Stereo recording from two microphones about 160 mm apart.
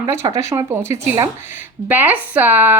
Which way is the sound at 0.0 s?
20° right (ahead or behind).